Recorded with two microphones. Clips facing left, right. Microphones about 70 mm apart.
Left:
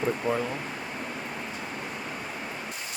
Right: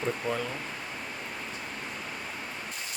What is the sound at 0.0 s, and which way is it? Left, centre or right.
Speech, centre.